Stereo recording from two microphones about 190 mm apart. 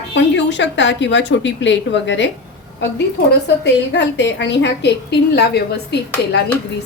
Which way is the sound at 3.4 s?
65° left (ahead or behind).